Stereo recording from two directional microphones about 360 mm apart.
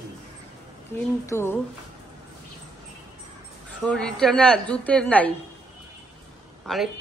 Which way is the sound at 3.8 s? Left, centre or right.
Centre.